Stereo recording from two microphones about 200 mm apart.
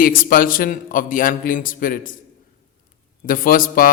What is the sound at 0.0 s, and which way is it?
A man's voice, 45° left (ahead or behind).